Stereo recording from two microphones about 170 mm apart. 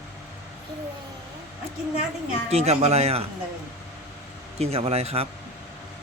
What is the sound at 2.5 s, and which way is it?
Speech, 40° right (ahead or behind).